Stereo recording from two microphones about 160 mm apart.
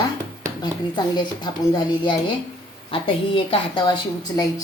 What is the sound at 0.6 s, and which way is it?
A woman's voice, 25° left (ahead or behind).